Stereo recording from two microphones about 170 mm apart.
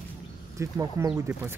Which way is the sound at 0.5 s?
20° right (ahead or behind).